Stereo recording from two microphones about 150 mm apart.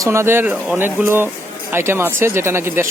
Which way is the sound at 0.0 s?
20° right (ahead or behind).